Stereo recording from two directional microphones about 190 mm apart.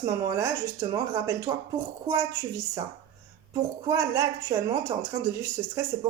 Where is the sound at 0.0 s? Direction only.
20° right (ahead or behind).